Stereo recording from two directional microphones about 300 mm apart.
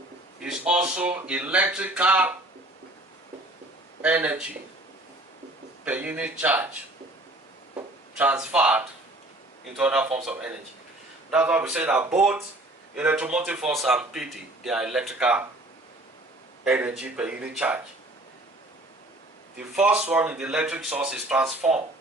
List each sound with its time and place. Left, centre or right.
0.4 s a man's voice: centre
4.0 s a man's voice: centre
5.8 s a man's voice: centre
8.1 s a man's voice: centre
16.6 s a man's voice: centre
19.5 s a man's voice: centre